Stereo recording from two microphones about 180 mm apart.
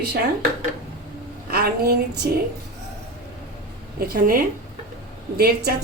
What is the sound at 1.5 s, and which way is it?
Speech, 60° right (ahead or behind).